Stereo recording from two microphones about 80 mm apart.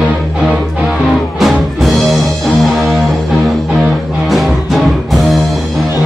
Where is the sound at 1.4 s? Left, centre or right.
Centre.